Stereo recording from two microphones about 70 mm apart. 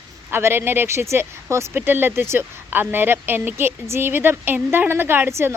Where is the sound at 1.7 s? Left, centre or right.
Right.